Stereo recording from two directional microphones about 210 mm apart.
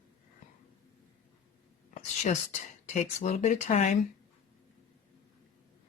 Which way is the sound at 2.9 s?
35° left (ahead or behind).